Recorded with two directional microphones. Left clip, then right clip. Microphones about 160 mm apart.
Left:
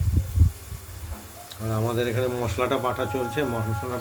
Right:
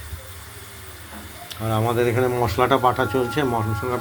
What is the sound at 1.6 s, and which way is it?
Speech, 20° right (ahead or behind).